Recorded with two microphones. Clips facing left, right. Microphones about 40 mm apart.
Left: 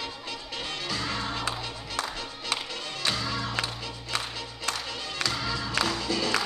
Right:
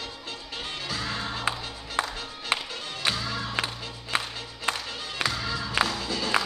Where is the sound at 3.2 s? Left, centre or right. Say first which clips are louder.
Even; centre.